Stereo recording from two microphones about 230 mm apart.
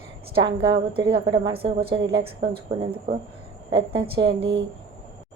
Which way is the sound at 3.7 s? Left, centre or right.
Right.